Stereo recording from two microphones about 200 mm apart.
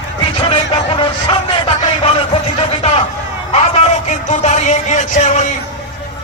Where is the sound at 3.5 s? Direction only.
35° left (ahead or behind).